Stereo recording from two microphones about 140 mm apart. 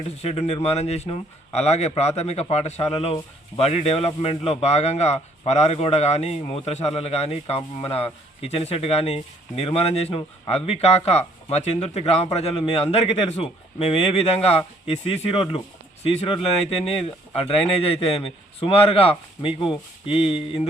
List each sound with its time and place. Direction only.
0.2 s speech: 45° left (ahead or behind)